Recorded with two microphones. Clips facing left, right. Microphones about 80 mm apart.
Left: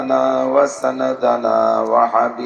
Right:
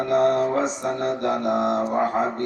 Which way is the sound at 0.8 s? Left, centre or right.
Left.